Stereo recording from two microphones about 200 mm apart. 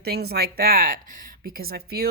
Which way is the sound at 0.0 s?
50° right (ahead or behind).